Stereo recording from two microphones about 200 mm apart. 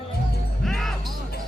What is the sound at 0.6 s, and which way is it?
Music, centre (ahead or behind).